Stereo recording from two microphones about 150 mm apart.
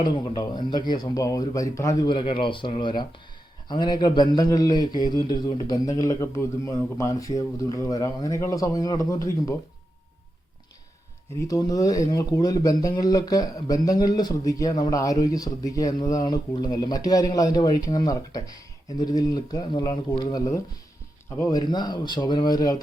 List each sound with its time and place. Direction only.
0.0 s speech: 30° left (ahead or behind)
11.3 s speech: 20° left (ahead or behind)